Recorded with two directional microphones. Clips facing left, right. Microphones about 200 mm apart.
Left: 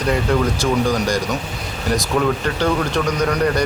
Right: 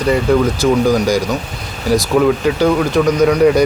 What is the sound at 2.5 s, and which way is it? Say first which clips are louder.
A man's voice: right 6 dB; 10° right (ahead or behind).